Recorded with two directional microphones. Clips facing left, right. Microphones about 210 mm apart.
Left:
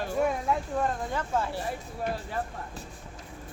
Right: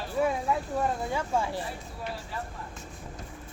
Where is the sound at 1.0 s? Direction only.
10° right (ahead or behind).